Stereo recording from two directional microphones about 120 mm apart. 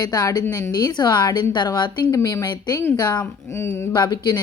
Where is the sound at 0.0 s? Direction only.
35° left (ahead or behind).